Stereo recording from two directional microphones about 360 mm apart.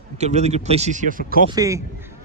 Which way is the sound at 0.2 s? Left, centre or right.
Centre.